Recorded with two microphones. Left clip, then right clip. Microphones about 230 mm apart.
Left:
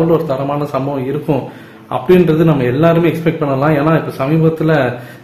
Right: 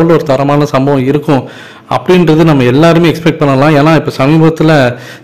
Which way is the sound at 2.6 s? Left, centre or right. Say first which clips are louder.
Right 5 dB; right.